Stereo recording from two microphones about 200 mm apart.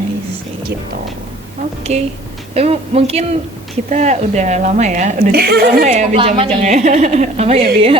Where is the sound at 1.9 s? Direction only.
35° right (ahead or behind).